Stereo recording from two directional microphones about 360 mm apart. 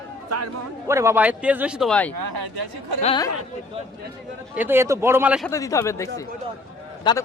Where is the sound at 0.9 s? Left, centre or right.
Centre.